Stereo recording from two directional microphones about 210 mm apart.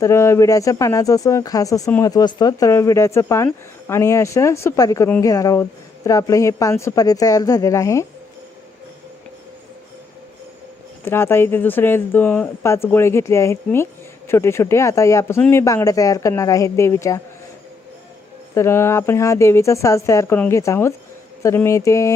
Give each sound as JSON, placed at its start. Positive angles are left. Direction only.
{"t": 0.0, "sound": "speech", "side_deg": 15}
{"t": 11.0, "sound": "speech", "side_deg": 10}
{"t": 18.5, "sound": "speech", "side_deg": 10}